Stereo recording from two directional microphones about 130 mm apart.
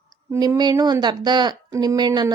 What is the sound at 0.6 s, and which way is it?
Speech, 35° right (ahead or behind).